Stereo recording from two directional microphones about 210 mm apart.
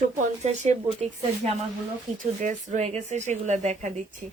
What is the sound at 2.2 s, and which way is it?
Speech, 35° right (ahead or behind).